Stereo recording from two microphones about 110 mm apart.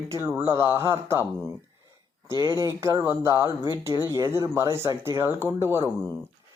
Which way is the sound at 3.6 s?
40° left (ahead or behind).